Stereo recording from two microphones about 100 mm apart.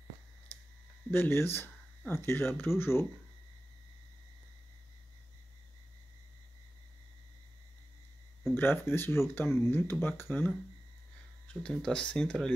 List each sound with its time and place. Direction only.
1.1 s speech: 20° left (ahead or behind)
8.5 s speech: 20° left (ahead or behind)